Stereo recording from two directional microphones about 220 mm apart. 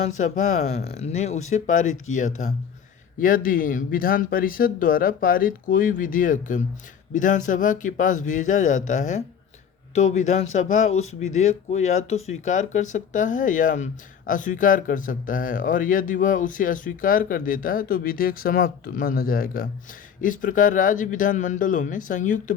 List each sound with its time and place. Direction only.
0.0 s speech: 35° left (ahead or behind)